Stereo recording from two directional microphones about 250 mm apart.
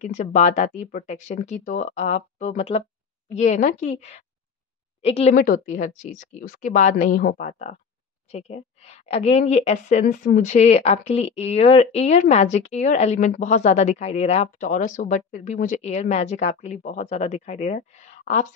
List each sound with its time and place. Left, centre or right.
0.0 s speech: left